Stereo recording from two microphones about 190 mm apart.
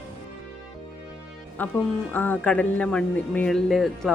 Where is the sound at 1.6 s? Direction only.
10° left (ahead or behind).